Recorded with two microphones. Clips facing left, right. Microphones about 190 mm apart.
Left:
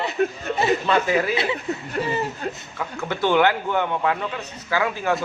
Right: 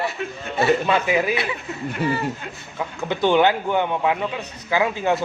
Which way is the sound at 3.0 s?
15° right (ahead or behind).